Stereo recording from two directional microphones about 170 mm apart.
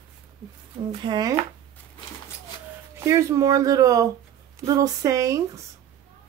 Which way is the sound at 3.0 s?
20° right (ahead or behind).